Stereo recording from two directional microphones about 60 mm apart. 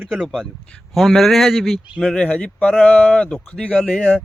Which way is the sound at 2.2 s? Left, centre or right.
Left.